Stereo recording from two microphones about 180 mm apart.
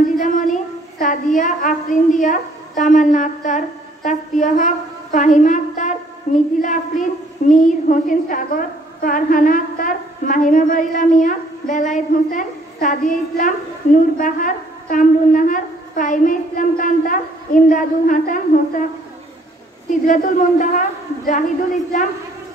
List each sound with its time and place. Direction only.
0.2 s child singing: 45° left (ahead or behind)
0.9 s a woman's voice: 45° left (ahead or behind)
20.1 s a woman's voice: 45° left (ahead or behind)